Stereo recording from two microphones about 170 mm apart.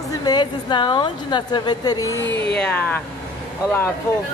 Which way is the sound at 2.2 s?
85° left.